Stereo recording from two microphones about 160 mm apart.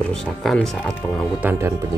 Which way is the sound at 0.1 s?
5° left (ahead or behind).